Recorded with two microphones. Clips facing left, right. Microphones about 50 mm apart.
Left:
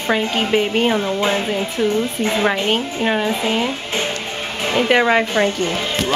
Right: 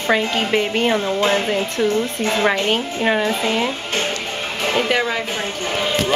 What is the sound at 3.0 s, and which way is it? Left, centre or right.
Speech, centre.